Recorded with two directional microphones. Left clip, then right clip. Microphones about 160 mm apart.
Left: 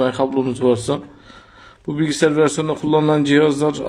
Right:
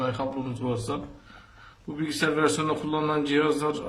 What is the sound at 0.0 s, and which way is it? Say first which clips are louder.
Speech: left 11 dB; 55° left (ahead or behind).